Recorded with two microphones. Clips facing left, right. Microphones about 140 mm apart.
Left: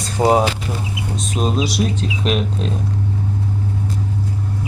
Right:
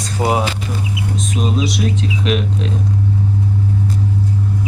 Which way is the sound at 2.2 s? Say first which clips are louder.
Even; 40° left (ahead or behind).